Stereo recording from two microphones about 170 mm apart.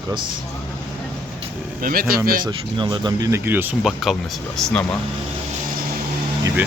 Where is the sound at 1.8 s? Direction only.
60° right (ahead or behind).